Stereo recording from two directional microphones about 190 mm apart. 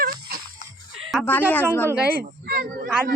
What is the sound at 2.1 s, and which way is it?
Speech, 55° right (ahead or behind).